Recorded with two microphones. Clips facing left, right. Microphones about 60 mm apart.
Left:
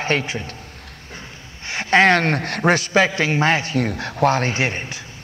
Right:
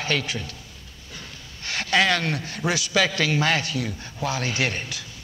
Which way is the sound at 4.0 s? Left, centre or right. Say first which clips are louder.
Left 12 dB; left.